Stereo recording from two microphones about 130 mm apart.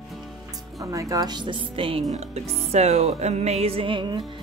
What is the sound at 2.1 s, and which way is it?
Music, 55° right (ahead or behind).